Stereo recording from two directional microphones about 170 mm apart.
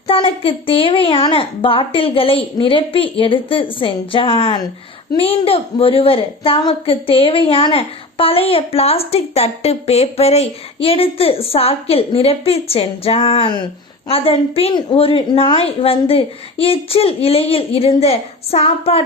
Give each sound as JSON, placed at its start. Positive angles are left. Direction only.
{"t": 0.1, "sound": "a woman's voice", "side_deg": 30}